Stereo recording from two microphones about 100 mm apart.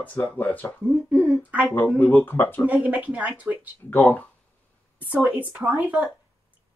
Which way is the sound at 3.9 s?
15° left (ahead or behind).